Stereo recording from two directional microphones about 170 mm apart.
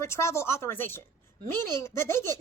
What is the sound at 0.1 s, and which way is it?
Speech, 15° left (ahead or behind).